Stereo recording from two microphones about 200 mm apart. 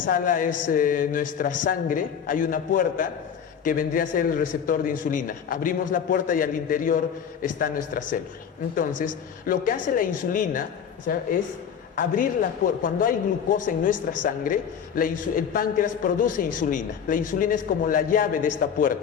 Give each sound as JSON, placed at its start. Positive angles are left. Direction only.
{"t": 0.0, "sound": "a man's voice", "side_deg": 45}